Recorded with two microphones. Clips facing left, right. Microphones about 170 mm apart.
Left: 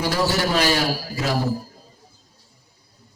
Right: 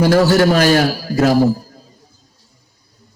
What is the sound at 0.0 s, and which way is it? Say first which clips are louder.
A man's voice: right 10 dB; 50° right (ahead or behind).